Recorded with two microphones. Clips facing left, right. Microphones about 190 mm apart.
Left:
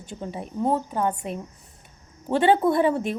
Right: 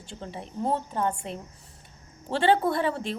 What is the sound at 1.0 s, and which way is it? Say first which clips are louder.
Speech: left 3 dB; 20° left (ahead or behind).